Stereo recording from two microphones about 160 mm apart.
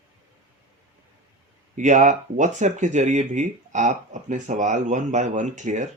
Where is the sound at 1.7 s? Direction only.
50° right (ahead or behind).